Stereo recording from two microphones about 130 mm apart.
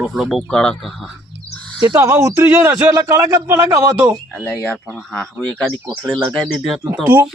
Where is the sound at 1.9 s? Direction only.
20° right (ahead or behind).